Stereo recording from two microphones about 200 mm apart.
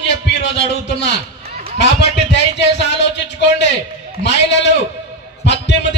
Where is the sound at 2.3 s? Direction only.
60° left (ahead or behind).